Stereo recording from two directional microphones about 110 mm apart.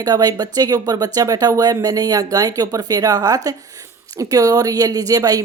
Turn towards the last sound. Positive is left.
turn(degrees=-35)  # may be behind; listen again after turning